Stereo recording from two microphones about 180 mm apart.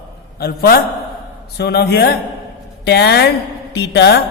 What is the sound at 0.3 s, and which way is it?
A man's voice, 60° left (ahead or behind).